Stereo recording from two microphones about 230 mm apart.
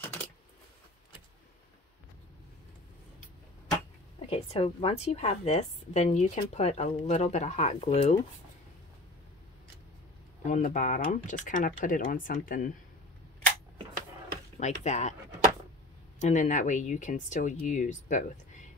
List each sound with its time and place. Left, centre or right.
0.0 s a sound: centre
4.3 s a woman's voice: left
10.4 s speech: left
14.6 s a woman's voice: left
16.2 s speech: left